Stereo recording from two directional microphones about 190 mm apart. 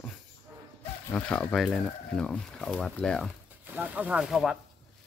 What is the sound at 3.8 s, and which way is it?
Speech, 5° right (ahead or behind).